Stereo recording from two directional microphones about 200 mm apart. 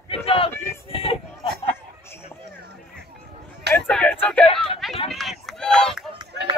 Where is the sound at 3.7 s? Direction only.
5° left (ahead or behind).